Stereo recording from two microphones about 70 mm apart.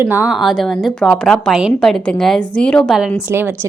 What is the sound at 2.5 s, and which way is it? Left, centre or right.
Speech, centre.